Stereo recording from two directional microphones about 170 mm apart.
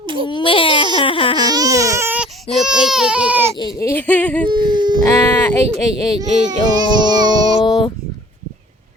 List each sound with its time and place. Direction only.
0.0 s baby cry: 30° right (ahead or behind)
0.3 s baby cry: 30° left (ahead or behind)
1.5 s baby cry: 20° right (ahead or behind)
3.6 s a sound: 20° left (ahead or behind)
4.4 s whimper: 25° right (ahead or behind)
5.0 s a sound: 15° left (ahead or behind)
5.6 s speech: 35° right (ahead or behind)
6.9 s child singing: 25° right (ahead or behind)
7.6 s a sound: 25° left (ahead or behind)